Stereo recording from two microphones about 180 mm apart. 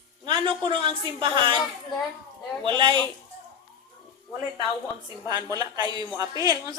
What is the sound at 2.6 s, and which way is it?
Speech, 25° right (ahead or behind).